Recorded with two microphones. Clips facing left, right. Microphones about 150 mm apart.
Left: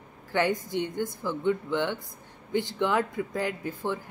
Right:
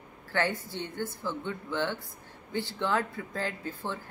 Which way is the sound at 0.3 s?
15° left (ahead or behind).